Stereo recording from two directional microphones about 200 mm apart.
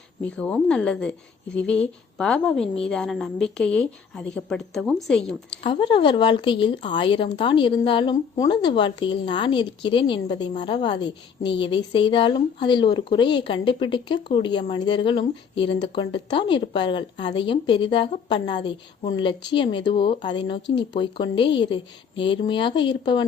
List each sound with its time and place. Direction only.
0.2 s a woman's voice: 5° left (ahead or behind)
5.6 s speech: 25° left (ahead or behind)